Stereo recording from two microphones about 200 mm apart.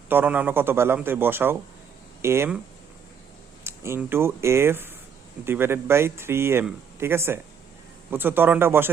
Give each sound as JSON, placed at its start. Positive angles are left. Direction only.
{"t": 0.1, "sound": "speech", "side_deg": -10}
{"t": 3.6, "sound": "speech", "side_deg": -10}